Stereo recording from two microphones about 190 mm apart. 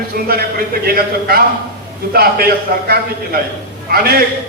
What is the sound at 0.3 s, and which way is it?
A man's voice, 50° right (ahead or behind).